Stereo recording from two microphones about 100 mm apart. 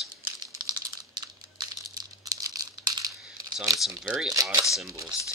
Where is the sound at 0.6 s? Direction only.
45° right (ahead or behind).